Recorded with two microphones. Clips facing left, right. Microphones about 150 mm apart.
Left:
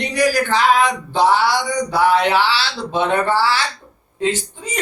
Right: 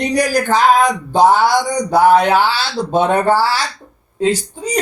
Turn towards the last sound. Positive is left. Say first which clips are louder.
# right 4 dB
turn(degrees=-40)  # may be behind; listen again after turning